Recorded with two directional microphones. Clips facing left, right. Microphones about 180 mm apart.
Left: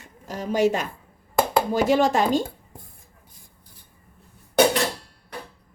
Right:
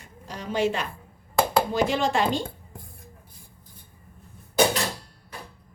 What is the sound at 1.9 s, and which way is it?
Speech, 45° left (ahead or behind).